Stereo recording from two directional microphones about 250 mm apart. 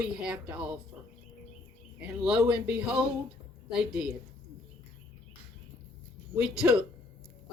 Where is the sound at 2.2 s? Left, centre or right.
Centre.